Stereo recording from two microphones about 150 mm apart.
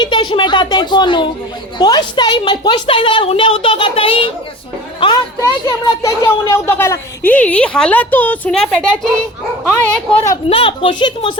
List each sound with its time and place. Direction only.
0.0 s a woman's voice: 30° left (ahead or behind)
5.4 s a woman's voice: 20° left (ahead or behind)
10.5 s a woman's voice: 35° left (ahead or behind)